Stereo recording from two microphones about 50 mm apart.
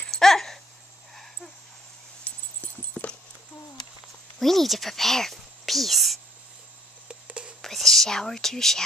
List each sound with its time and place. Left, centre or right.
0.0 s a sound: centre
1.1 s dog: centre
2.2 s dog: left
4.4 s speech: centre
7.1 s a sound: right
7.6 s speech: centre